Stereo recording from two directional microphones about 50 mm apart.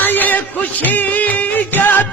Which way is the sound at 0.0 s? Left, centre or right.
Left.